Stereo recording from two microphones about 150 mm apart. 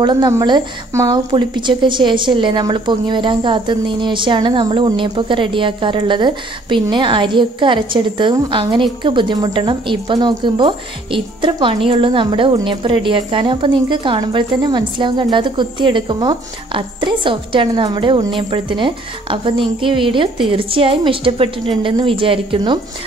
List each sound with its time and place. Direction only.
0.0 s a woman's voice: 30° right (ahead or behind)